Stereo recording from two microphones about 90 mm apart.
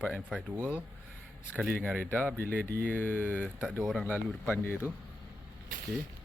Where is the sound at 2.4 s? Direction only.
20° left (ahead or behind).